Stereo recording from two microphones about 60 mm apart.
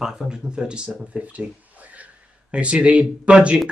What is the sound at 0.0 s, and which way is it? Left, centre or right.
Speech, centre.